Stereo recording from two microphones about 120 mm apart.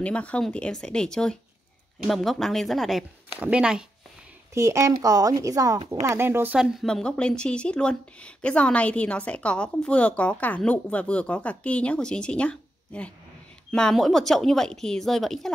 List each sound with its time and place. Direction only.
0.0 s speech: 10° left (ahead or behind)
3.3 s speech: 10° right (ahead or behind)
4.6 s a woman's voice: 25° right (ahead or behind)
6.0 s a woman's voice: 20° right (ahead or behind)
6.6 s speech: centre (ahead or behind)